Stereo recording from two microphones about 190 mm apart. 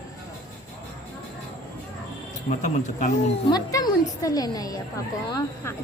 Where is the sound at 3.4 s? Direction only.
20° left (ahead or behind).